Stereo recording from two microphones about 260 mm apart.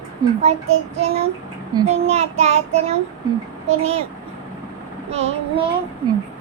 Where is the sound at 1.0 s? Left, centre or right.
Right.